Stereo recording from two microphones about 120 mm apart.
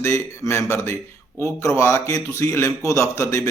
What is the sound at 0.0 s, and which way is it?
A man's voice, 25° left (ahead or behind).